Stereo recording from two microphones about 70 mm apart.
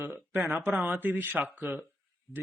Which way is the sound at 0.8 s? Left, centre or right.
Right.